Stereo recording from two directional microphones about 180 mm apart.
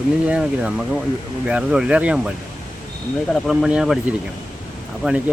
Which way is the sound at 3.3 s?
Centre (ahead or behind).